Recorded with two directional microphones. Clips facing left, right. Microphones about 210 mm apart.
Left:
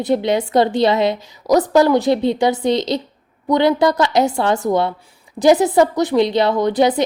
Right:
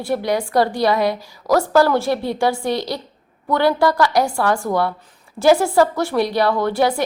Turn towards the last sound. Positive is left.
turn(degrees=20)  # may be behind; listen again after turning